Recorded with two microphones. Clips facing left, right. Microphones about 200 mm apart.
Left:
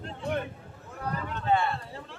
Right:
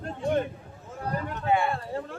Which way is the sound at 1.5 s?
10° right (ahead or behind).